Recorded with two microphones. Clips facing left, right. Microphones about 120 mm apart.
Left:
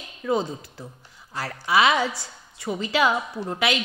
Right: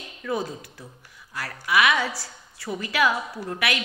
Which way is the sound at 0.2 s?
25° left (ahead or behind).